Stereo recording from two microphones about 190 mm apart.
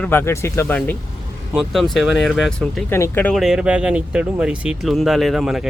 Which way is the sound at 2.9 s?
10° left (ahead or behind).